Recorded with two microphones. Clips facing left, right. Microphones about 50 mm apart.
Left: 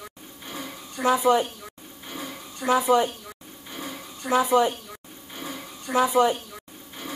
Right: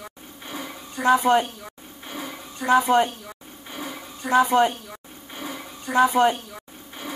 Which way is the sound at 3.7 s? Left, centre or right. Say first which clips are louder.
Right 2 dB; centre.